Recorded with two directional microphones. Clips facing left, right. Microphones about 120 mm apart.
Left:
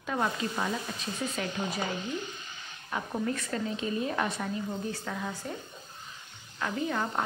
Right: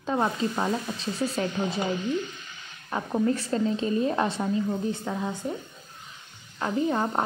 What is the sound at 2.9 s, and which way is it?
A woman's voice, 30° right (ahead or behind).